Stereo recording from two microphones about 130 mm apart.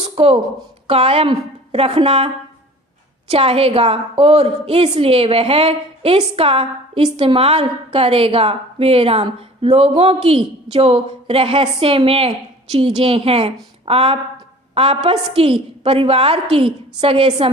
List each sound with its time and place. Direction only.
0.2 s a woman's voice: 45° right (ahead or behind)